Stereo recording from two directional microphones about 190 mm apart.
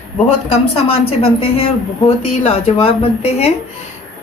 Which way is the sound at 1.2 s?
30° left (ahead or behind).